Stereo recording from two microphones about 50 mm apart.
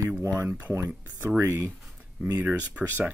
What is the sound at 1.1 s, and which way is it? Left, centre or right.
Speech, right.